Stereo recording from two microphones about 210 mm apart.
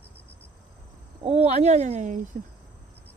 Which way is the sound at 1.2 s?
30° right (ahead or behind).